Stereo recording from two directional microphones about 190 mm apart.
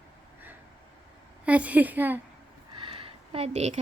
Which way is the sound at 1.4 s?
5° right (ahead or behind).